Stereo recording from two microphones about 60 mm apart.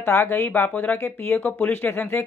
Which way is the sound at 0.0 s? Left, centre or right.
Left.